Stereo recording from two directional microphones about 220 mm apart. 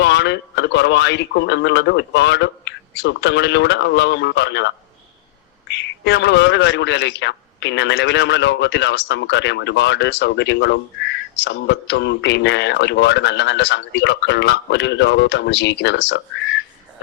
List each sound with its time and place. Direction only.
0.0 s a man's voice: 55° left (ahead or behind)